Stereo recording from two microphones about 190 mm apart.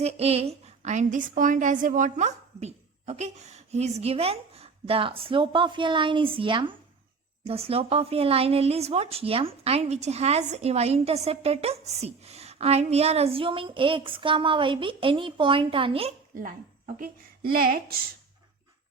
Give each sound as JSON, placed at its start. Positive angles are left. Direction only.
{"t": 0.0, "sound": "speech", "side_deg": -30}
{"t": 16.4, "sound": "speech", "side_deg": -50}